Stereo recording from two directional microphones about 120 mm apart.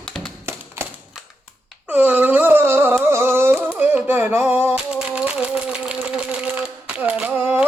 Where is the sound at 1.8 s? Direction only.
15° right (ahead or behind).